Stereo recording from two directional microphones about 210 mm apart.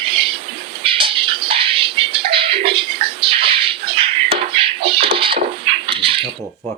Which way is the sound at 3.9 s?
25° right (ahead or behind).